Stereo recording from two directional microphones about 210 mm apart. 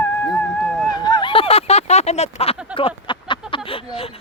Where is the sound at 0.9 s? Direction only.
20° left (ahead or behind).